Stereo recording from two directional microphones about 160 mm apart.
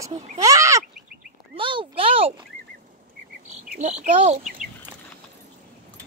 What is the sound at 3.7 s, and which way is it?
Speech, 45° right (ahead or behind).